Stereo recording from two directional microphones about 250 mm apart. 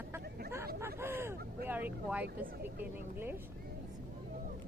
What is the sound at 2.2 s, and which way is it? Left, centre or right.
Speech, right.